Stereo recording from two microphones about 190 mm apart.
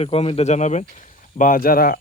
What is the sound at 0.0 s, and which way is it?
A man's voice, 30° left (ahead or behind).